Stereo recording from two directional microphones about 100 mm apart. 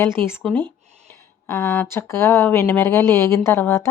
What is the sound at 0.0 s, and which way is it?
Speech, 25° left (ahead or behind).